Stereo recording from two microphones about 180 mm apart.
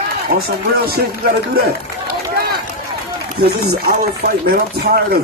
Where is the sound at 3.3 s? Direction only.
60° right (ahead or behind).